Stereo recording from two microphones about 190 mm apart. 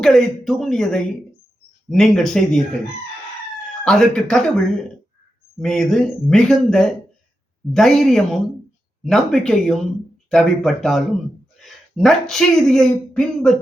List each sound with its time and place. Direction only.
0.0 s speech: centre (ahead or behind)
3.8 s speech: 5° left (ahead or behind)
11.5 s a sound: centre (ahead or behind)
12.3 s speech: centre (ahead or behind)